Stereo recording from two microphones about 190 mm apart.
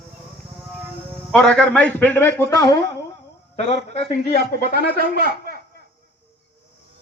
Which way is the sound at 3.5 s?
35° left (ahead or behind).